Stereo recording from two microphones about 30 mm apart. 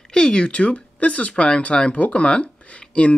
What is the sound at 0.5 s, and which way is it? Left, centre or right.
Speech, left.